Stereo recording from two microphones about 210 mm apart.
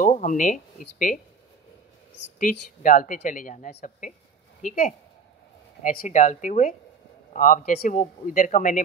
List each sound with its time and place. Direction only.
0.0 s speech: 40° left (ahead or behind)
2.3 s a woman's voice: 40° left (ahead or behind)